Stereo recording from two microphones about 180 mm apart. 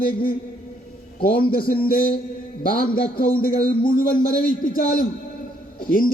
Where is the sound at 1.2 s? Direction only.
55° left (ahead or behind).